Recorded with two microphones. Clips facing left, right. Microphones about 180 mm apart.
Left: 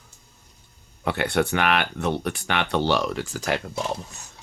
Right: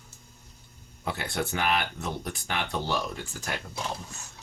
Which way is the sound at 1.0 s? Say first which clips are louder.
Left 8 dB; 70° left (ahead or behind).